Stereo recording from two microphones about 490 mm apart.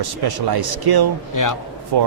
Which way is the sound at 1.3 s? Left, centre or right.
Left.